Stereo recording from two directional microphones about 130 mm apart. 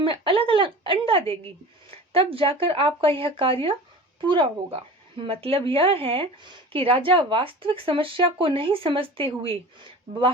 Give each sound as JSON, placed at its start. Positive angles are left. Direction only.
{"t": 0.0, "sound": "speech", "side_deg": -45}